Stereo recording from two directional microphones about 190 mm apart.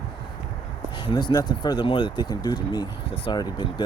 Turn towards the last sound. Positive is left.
turn(degrees=20)  # may be behind; listen again after turning